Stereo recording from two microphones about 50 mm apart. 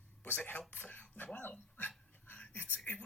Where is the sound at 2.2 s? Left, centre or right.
Left.